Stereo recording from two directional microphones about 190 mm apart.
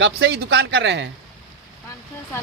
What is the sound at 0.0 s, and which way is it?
Speech, 70° right (ahead or behind).